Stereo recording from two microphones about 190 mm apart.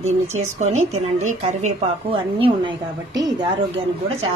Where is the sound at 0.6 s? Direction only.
35° right (ahead or behind).